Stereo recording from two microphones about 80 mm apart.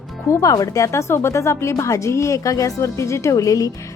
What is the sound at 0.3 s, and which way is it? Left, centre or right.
Speech, left.